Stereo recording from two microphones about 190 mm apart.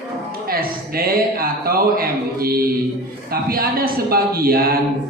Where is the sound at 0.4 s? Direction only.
50° right (ahead or behind).